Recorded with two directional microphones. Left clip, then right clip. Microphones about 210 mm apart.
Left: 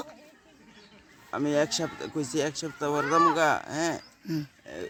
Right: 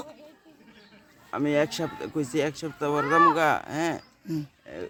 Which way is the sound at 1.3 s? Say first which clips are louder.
Right 1 dB; 5° right (ahead or behind).